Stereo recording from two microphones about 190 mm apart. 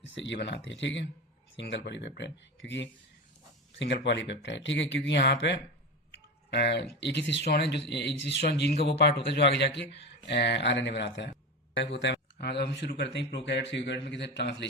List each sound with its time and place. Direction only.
0.0 s speech: 70° left (ahead or behind)